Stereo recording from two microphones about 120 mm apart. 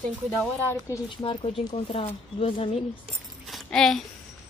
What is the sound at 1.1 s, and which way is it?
Speech, 45° left (ahead or behind).